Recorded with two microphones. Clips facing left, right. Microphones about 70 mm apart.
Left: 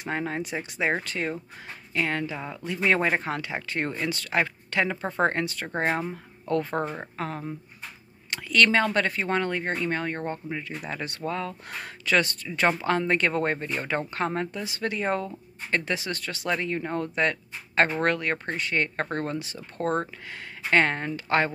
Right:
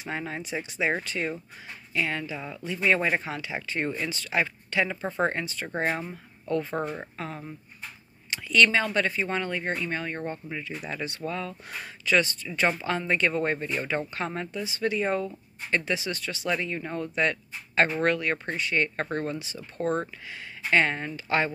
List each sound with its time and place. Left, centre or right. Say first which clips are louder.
0.0 s speech: left 4 dB; left
10.9 s speech: left 2 dB; left